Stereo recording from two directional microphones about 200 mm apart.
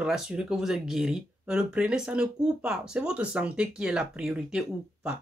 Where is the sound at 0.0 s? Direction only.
5° right (ahead or behind).